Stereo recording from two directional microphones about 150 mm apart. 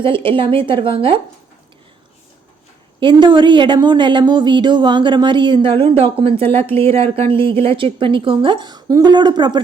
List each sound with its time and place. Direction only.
0.3 s a woman's voice: 35° right (ahead or behind)
3.0 s a woman's voice: 30° right (ahead or behind)